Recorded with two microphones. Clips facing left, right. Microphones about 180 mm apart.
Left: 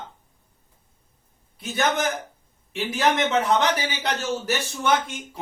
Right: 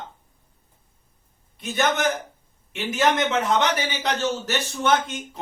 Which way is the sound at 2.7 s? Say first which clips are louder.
Right 1 dB; centre (ahead or behind).